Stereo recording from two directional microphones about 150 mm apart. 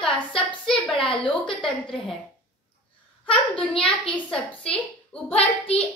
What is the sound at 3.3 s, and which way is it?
A child's voice, 10° left (ahead or behind).